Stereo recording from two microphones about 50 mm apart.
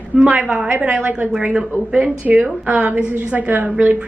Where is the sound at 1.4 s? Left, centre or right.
Centre.